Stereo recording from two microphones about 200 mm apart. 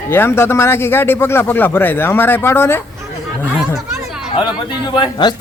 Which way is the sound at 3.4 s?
5° right (ahead or behind).